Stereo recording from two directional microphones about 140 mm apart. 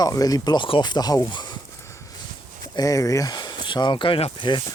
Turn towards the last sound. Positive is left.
turn(degrees=35)  # may be behind; listen again after turning